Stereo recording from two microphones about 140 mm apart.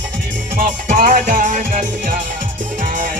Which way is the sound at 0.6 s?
85° right.